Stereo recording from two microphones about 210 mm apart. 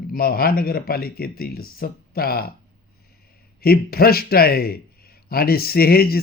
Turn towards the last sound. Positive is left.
turn(degrees=45)  # may be behind; listen again after turning